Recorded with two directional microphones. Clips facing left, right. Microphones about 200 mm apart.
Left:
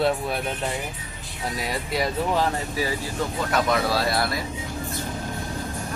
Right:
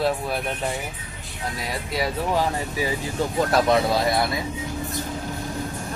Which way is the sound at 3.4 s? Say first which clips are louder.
Right 4 dB; 35° right (ahead or behind).